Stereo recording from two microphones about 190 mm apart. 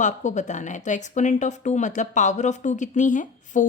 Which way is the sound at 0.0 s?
40° left (ahead or behind).